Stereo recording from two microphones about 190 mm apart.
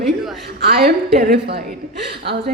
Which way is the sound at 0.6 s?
55° right (ahead or behind).